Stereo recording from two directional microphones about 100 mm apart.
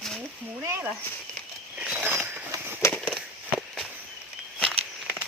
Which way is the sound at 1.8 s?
10° right (ahead or behind).